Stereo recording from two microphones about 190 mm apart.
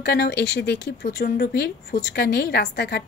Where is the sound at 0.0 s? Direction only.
55° left (ahead or behind).